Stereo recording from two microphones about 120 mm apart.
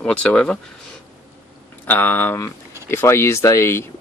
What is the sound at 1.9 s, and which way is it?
Speech, 15° left (ahead or behind).